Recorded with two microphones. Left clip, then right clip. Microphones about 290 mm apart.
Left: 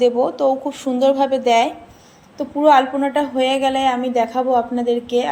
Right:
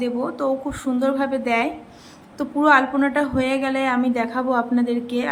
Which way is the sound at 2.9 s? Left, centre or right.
Right.